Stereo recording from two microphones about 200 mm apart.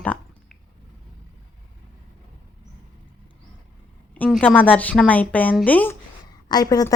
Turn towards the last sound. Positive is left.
turn(degrees=20)  # may be behind; listen again after turning